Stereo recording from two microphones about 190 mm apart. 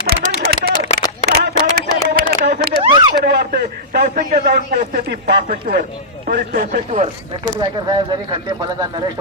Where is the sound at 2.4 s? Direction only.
60° right (ahead or behind).